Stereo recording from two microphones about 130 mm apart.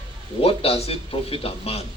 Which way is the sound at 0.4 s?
50° left (ahead or behind).